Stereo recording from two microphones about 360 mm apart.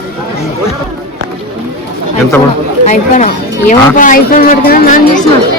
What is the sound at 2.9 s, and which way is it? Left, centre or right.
Speech, centre.